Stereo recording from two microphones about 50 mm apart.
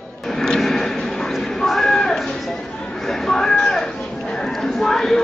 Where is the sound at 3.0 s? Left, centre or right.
Centre.